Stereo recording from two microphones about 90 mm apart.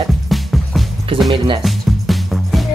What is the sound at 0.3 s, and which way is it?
Music, centre (ahead or behind).